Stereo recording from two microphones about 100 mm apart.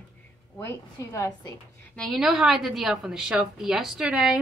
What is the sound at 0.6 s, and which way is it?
Speech, 25° left (ahead or behind).